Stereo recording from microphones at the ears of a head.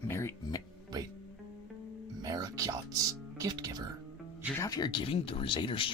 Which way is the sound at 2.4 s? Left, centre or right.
Right.